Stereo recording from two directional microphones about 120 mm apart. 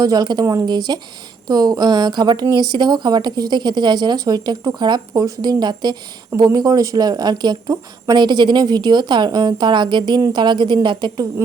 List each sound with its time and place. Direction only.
0.0 s speech: 35° right (ahead or behind)